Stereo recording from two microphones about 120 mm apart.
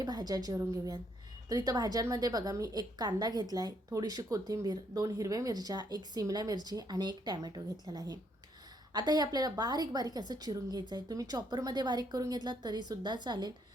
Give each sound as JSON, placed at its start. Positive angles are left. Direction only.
{"t": 0.0, "sound": "a woman's voice", "side_deg": -35}